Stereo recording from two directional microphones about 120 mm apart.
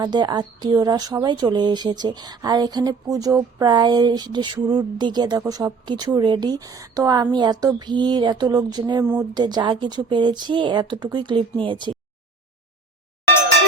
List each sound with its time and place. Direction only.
0.0 s speech: 35° right (ahead or behind)